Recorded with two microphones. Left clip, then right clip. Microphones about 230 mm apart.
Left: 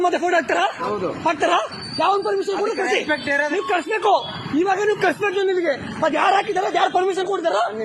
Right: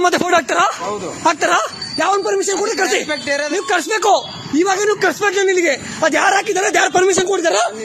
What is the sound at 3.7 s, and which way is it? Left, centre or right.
A man's voice, right.